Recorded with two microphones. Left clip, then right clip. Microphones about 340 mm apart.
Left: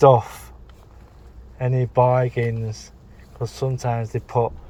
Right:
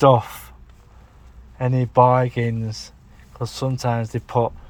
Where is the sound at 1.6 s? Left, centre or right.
Centre.